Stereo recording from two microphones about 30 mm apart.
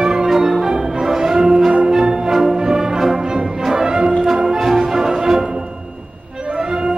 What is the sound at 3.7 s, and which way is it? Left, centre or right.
Brass instrument, right.